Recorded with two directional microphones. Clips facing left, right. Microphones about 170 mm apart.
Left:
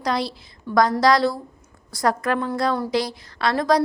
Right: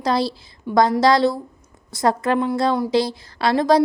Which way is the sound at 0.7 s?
15° right (ahead or behind).